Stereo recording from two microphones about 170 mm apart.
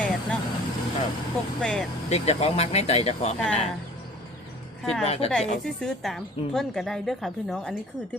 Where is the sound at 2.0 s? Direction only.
40° left (ahead or behind).